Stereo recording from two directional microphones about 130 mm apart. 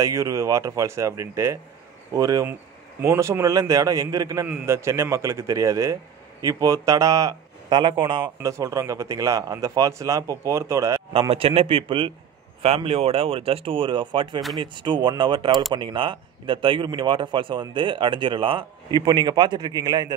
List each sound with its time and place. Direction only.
0.0 s speech: 25° right (ahead or behind)
7.7 s speech: 40° right (ahead or behind)
8.4 s speech: 25° right (ahead or behind)
11.1 s speech: 45° right (ahead or behind); by 20.2 s 30° right (ahead or behind)